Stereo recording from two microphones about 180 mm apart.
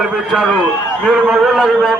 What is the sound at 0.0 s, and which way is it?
A man's voice, 5° right (ahead or behind).